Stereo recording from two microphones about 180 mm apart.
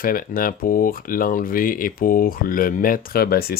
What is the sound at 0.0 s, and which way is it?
Speech, 50° left (ahead or behind).